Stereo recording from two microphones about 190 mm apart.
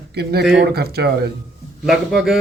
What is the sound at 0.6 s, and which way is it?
Speech, 55° right (ahead or behind).